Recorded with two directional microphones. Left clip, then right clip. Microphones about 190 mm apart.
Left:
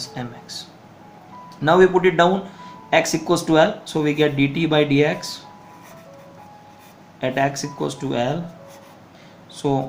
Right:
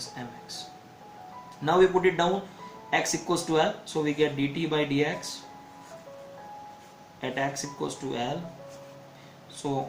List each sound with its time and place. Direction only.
0.1 s a sound: 50° left (ahead or behind)
1.6 s speech: 50° left (ahead or behind)
7.2 s speech: 50° left (ahead or behind)
9.6 s speech: 50° left (ahead or behind)